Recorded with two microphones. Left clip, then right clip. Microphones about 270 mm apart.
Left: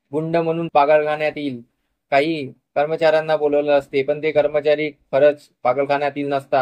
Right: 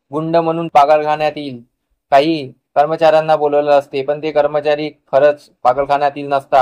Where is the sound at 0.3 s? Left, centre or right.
Centre.